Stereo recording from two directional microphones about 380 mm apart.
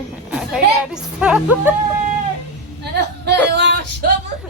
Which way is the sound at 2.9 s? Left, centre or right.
Right.